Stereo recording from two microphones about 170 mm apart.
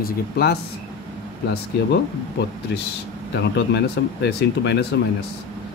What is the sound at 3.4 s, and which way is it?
Speech, 80° left.